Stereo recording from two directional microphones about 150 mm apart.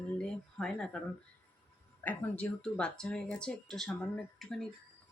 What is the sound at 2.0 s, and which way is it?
Speech, 10° left (ahead or behind).